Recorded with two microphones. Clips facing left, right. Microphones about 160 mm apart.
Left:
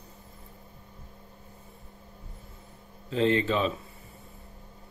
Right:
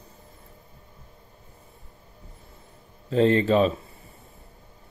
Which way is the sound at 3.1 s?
40° right (ahead or behind).